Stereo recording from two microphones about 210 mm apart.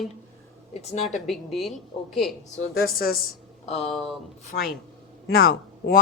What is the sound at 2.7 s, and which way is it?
Speech, 45° left (ahead or behind).